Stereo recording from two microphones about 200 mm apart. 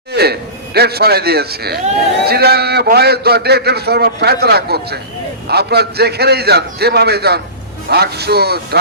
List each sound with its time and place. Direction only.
0.1 s a man's voice: 55° right (ahead or behind)